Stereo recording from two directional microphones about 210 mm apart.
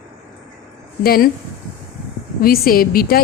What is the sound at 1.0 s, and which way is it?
Speech, 45° left (ahead or behind).